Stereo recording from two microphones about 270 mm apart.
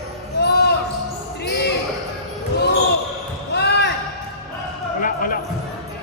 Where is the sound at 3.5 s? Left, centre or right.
Left.